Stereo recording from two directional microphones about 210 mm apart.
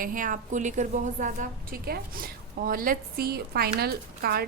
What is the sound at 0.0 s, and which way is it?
A woman's voice, 40° right (ahead or behind).